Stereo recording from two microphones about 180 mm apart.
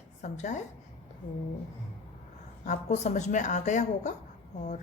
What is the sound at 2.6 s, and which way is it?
A woman's voice, 40° left (ahead or behind).